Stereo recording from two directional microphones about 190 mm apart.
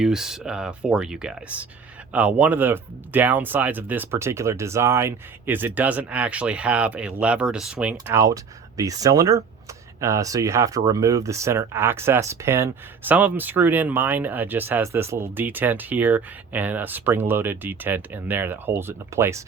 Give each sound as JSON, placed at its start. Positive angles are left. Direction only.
{"t": 0.0, "sound": "speech", "side_deg": 0}